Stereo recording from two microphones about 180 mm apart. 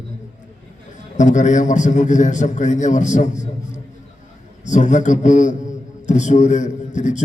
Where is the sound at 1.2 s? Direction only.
40° left (ahead or behind).